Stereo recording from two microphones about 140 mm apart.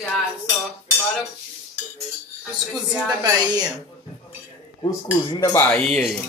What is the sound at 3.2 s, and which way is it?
Speech, 30° right (ahead or behind).